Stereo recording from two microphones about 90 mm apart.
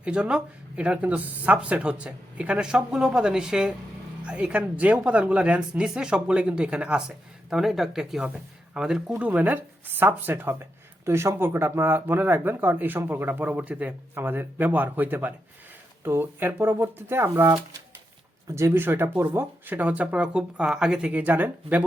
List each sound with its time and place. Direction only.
0.0 s speech: 10° right (ahead or behind)
9.1 s speech: 20° right (ahead or behind)